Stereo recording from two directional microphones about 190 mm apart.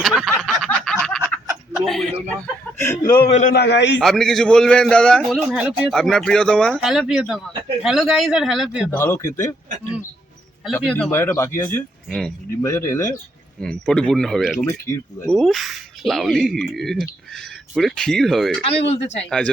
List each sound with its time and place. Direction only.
0.0 s snicker: centre (ahead or behind)
2.7 s speech: 10° left (ahead or behind)
3.2 s speech: 35° left (ahead or behind)
3.5 s a man's voice: 60° left (ahead or behind)
4.0 s speech: centre (ahead or behind)
9.0 s speech: 15° left (ahead or behind)
10.8 s speech: 5° left (ahead or behind)
12.0 s speech: centre (ahead or behind)
12.6 s speech: 15° left (ahead or behind)
13.6 s speech: 5° left (ahead or behind)
14.7 s speech: 15° left (ahead or behind)
15.3 s speech: centre (ahead or behind)
18.6 s speech: 30° left (ahead or behind)